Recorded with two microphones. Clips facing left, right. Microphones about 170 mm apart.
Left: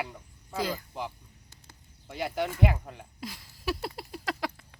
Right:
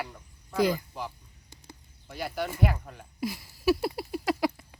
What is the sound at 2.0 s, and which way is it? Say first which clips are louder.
Speech: left 2 dB; 20° left (ahead or behind).